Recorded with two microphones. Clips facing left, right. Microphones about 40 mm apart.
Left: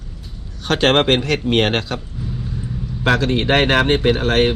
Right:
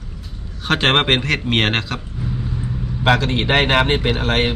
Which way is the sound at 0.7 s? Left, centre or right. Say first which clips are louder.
Left 1 dB; right.